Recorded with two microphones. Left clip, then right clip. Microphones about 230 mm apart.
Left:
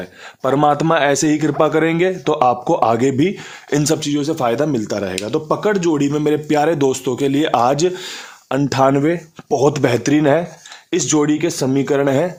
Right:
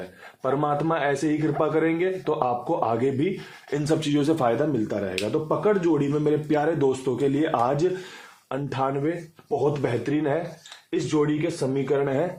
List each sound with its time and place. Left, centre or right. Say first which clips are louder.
0.4 s a man's voice: left 9 dB; left
4.0 s speech: left 4 dB; centre
4.4 s a man's voice: left 6 dB; left